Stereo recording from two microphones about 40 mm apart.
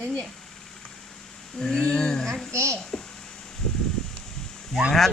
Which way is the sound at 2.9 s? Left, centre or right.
Left.